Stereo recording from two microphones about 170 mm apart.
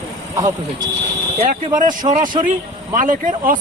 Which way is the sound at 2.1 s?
50° right (ahead or behind).